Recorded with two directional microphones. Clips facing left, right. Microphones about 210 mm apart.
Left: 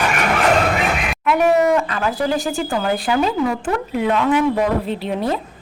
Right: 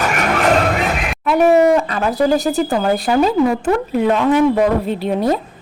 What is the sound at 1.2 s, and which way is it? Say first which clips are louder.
Speech: right 4 dB; 35° right (ahead or behind).